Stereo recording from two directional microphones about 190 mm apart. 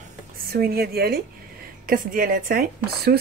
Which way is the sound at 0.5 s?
55° right (ahead or behind).